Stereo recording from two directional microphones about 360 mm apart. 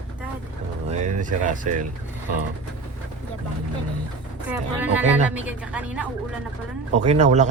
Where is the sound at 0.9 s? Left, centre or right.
Centre.